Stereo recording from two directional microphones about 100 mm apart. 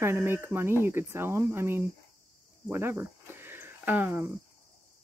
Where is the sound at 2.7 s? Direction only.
25° right (ahead or behind).